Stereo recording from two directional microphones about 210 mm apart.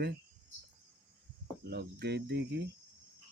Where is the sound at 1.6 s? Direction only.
50° right (ahead or behind).